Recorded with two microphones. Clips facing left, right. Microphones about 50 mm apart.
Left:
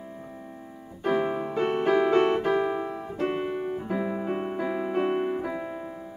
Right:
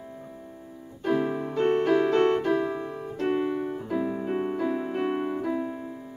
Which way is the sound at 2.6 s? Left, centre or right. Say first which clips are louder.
Left 2 dB; left.